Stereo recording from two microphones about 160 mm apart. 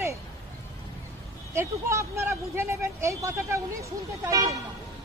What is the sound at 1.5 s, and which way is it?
Speech, 15° right (ahead or behind).